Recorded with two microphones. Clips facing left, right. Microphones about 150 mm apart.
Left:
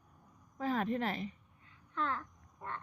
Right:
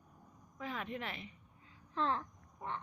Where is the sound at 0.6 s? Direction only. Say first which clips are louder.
Left 8 dB; 40° left (ahead or behind).